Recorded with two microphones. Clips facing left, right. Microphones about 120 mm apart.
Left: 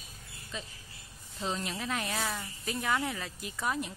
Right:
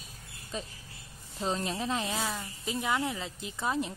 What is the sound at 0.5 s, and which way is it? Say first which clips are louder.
Speech: right 4 dB; 40° right (ahead or behind).